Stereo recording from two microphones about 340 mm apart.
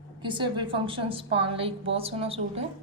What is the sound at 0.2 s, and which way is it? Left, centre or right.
A woman's voice, centre.